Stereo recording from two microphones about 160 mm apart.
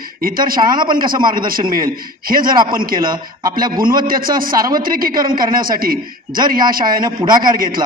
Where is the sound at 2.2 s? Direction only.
60° right (ahead or behind).